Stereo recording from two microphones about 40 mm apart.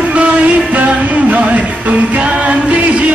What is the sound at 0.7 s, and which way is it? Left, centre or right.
Music, right.